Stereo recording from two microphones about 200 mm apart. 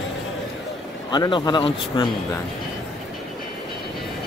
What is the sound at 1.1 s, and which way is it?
Speech, 20° left (ahead or behind).